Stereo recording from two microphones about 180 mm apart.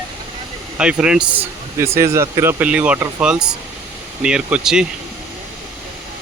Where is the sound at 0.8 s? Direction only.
5° right (ahead or behind).